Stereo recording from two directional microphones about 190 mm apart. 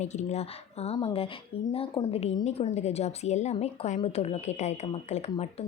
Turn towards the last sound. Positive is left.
turn(degrees=35)  # may be behind; listen again after turning